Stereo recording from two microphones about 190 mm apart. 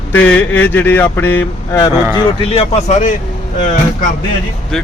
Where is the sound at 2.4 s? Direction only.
30° left (ahead or behind).